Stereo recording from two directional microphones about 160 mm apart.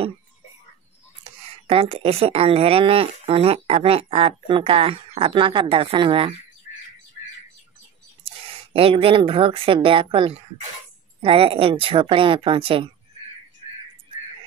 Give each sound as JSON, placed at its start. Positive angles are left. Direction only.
{"t": 1.7, "sound": "speech", "side_deg": -35}
{"t": 8.7, "sound": "speech", "side_deg": -35}